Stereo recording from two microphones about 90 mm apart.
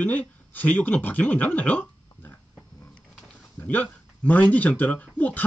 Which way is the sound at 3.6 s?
20° left (ahead or behind).